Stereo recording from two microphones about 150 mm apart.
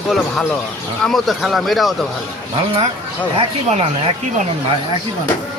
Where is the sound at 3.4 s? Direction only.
45° right (ahead or behind).